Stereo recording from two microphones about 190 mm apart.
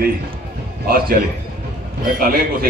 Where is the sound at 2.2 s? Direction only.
50° right (ahead or behind).